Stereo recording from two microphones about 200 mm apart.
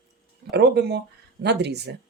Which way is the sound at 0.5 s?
55° right (ahead or behind).